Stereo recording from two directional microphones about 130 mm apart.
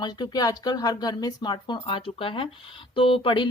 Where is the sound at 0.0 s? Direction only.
30° left (ahead or behind).